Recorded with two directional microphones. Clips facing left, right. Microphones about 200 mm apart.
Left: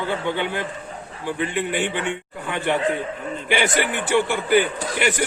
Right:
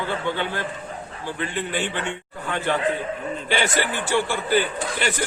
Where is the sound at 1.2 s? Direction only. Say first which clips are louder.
Left 4 dB; 15° left (ahead or behind).